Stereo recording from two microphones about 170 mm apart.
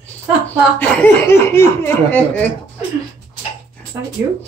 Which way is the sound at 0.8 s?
15° left (ahead or behind).